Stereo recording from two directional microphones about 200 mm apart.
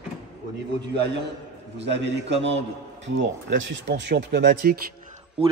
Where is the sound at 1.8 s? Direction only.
60° right (ahead or behind).